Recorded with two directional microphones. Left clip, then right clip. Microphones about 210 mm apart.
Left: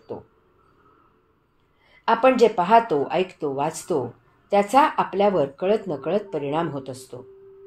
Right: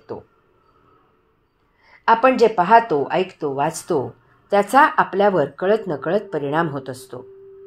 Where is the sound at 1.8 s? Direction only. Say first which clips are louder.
Right 3 dB; 25° right (ahead or behind).